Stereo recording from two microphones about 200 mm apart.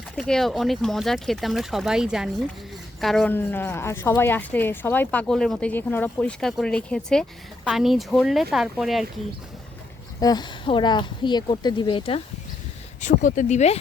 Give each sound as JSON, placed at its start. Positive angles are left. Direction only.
{"t": 0.2, "sound": "speech", "side_deg": 0}
{"t": 10.2, "sound": "speech", "side_deg": 20}
{"t": 13.0, "sound": "speech", "side_deg": 40}